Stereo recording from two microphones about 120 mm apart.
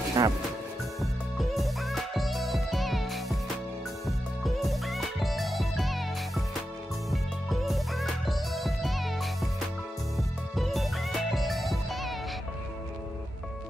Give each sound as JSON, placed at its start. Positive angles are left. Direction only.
{"t": 0.2, "sound": "speech", "side_deg": -30}
{"t": 1.4, "sound": "music", "side_deg": 0}